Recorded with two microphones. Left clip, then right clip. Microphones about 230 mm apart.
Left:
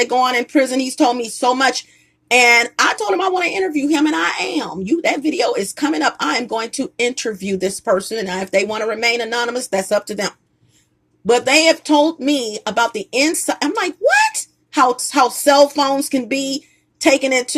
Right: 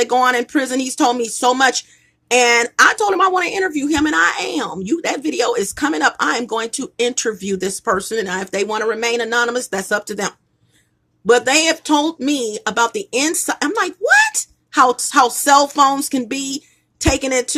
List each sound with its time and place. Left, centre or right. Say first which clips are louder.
0.0 s a woman's voice: right 1 dB; centre